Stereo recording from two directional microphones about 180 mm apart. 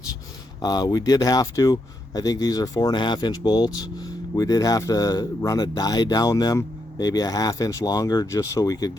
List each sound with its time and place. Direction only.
0.6 s speech: 20° left (ahead or behind)